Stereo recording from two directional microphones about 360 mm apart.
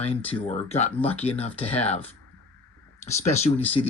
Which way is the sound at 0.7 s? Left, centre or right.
Centre.